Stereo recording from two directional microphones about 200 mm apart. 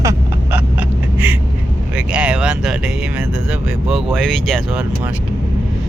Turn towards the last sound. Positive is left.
turn(degrees=0)  # may be behind; listen again after turning